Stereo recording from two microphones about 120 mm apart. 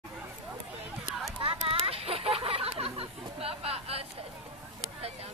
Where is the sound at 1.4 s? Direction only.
50° right (ahead or behind).